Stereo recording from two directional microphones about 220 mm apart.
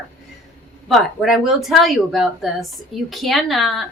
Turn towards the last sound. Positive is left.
turn(degrees=0)  # may be behind; listen again after turning